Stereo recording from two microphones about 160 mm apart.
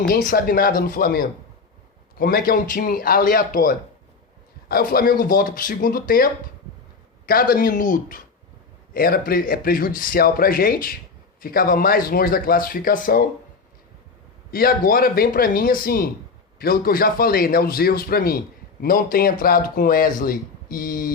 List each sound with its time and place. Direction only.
0.0 s speech: 65° left (ahead or behind)
14.5 s a man's voice: 65° left (ahead or behind)